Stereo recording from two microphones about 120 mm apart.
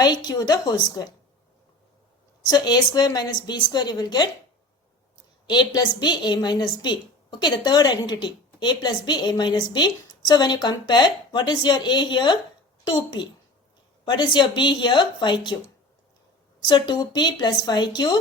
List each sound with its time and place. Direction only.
0.0 s a woman's voice: 35° left (ahead or behind)
2.4 s a woman's voice: 35° left (ahead or behind)
5.5 s a woman's voice: 40° left (ahead or behind)
16.6 s a woman's voice: 40° left (ahead or behind)